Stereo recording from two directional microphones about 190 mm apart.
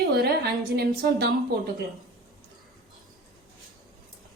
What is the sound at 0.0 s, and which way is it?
A woman's voice, 55° right (ahead or behind).